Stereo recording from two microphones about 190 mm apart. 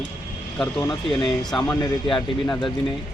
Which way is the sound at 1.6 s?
10° left (ahead or behind).